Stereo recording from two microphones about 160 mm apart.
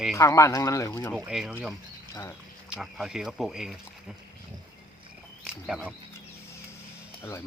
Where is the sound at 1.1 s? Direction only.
5° right (ahead or behind).